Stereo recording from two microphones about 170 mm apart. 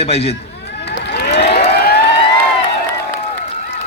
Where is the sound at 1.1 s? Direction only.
80° left.